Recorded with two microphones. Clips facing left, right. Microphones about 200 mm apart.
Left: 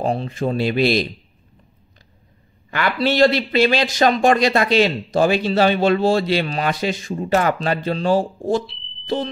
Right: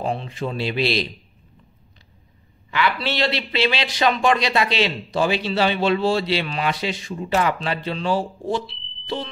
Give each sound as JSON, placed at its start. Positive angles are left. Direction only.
{"t": 0.0, "sound": "a man's voice", "side_deg": 40}
{"t": 2.7, "sound": "a man's voice", "side_deg": 50}
{"t": 9.0, "sound": "smoke detector", "side_deg": 45}